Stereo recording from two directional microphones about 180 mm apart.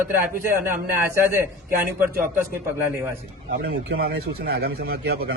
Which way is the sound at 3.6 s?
60° right (ahead or behind).